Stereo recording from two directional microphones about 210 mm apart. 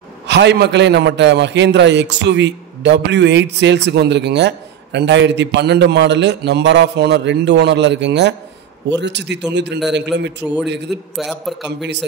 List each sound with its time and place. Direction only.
0.3 s a man's voice: 55° right (ahead or behind)
10.4 s a man's voice: 10° right (ahead or behind)
11.8 s a man's voice: 55° right (ahead or behind)